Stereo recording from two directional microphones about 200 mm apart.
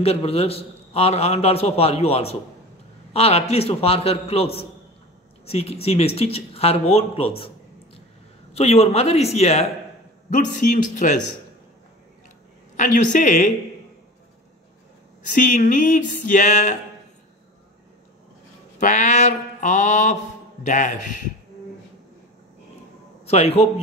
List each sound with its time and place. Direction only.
0.0 s a man's voice: 30° left (ahead or behind)
8.5 s a man's voice: 30° left (ahead or behind)
12.7 s a man's voice: 40° left (ahead or behind)
15.3 s a man's voice: 40° left (ahead or behind)
18.8 s a man's voice: 40° left (ahead or behind)
23.2 s a man's voice: 30° left (ahead or behind)